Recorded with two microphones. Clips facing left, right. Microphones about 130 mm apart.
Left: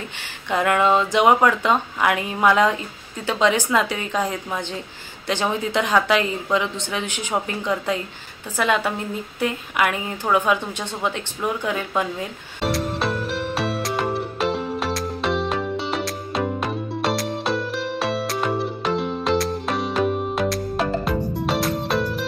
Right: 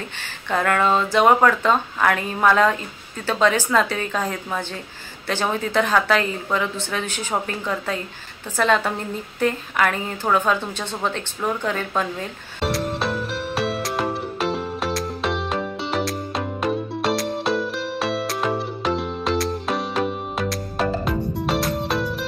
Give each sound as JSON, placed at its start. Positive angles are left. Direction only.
{"t": 0.5, "sound": "speech", "side_deg": 15}
{"t": 12.6, "sound": "music", "side_deg": 0}